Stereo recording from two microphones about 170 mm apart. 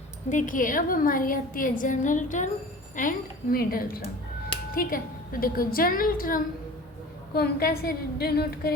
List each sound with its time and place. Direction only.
0.3 s a woman's voice: 50° left (ahead or behind); by 8.7 s 65° left (ahead or behind)